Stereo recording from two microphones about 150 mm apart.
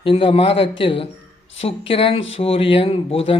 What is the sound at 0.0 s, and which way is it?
Speech, 35° left (ahead or behind).